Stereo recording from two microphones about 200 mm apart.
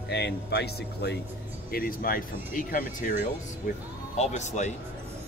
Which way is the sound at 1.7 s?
45° left (ahead or behind).